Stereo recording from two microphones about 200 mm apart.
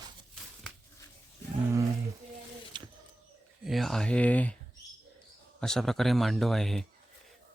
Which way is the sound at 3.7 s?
Centre (ahead or behind).